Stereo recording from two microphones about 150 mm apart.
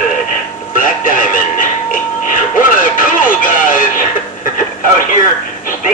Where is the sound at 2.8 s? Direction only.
65° left (ahead or behind).